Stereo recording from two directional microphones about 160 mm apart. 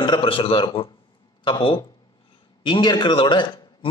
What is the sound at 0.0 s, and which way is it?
A man's voice, 30° left (ahead or behind).